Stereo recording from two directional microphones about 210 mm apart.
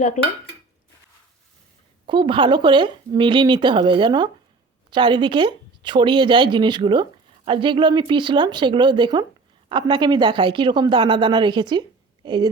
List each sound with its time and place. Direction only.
0.2 s dishes: 35° left (ahead or behind)
2.0 s speech: 25° right (ahead or behind)